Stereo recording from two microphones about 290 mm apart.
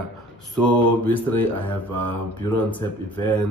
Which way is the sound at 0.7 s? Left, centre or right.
Centre.